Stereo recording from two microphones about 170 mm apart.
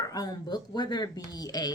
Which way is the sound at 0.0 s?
20° left (ahead or behind).